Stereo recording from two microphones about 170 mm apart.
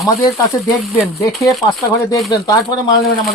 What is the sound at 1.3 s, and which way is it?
Speech, centre (ahead or behind).